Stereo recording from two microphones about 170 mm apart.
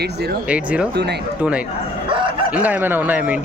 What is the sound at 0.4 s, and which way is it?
Speech, 5° right (ahead or behind).